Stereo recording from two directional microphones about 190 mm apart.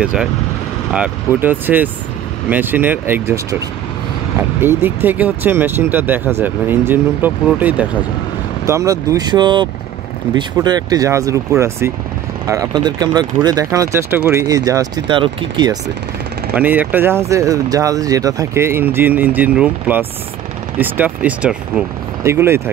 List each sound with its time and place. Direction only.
0.0 s speech: 5° right (ahead or behind)
4.4 s speech: 10° right (ahead or behind)
16.5 s speech: 10° right (ahead or behind)